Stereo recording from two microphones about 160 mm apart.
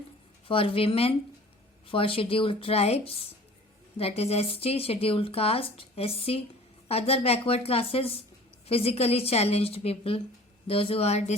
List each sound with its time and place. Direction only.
0.4 s speech: 35° left (ahead or behind)